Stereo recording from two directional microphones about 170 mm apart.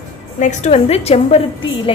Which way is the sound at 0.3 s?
45° left (ahead or behind).